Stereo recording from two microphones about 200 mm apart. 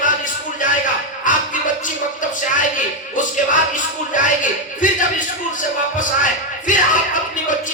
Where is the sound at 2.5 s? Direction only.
40° left (ahead or behind).